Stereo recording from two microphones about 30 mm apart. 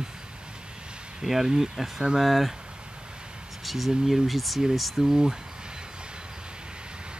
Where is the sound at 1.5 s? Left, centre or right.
Right.